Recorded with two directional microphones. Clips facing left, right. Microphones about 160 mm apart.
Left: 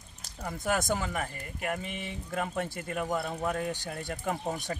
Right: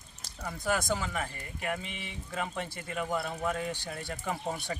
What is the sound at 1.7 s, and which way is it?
Speech, 45° left (ahead or behind).